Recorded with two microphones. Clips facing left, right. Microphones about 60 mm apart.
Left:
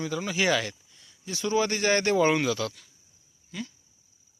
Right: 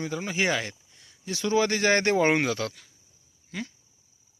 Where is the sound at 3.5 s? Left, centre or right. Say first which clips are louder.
Right 2 dB; right.